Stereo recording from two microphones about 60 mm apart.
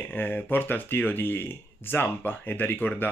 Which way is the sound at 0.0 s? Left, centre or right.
Left.